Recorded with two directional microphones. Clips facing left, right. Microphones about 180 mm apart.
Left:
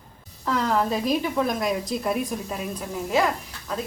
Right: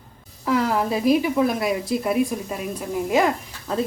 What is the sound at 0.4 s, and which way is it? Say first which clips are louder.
Speech: right 2 dB; 10° right (ahead or behind).